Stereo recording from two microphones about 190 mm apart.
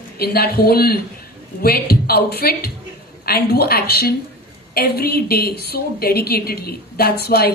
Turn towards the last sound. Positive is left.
turn(degrees=55)  # may be behind; listen again after turning